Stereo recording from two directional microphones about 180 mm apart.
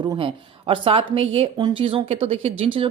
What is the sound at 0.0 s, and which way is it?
A woman's voice, 25° right (ahead or behind).